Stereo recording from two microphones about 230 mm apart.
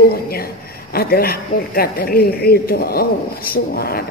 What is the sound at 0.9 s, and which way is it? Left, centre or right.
A woman's voice, left.